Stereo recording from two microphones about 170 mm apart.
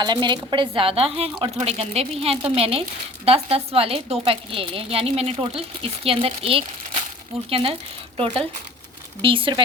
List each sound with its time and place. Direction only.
0.0 s a woman's voice: 25° right (ahead or behind)